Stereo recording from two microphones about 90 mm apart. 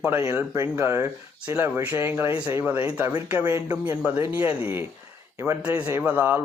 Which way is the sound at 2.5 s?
30° right (ahead or behind).